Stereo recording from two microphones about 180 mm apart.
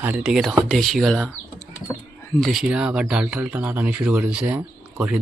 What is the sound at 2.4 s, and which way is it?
Speech, centre (ahead or behind).